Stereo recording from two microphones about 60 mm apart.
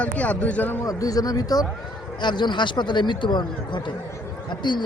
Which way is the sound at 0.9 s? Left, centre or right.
Left.